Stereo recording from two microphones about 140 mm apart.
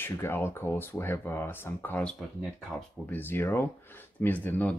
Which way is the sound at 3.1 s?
15° left (ahead or behind).